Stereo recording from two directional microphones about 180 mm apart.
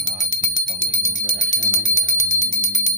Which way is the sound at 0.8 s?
90° left.